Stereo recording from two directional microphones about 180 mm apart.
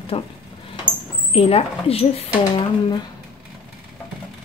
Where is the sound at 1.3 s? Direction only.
35° left (ahead or behind).